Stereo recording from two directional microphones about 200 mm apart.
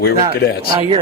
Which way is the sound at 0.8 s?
30° right (ahead or behind).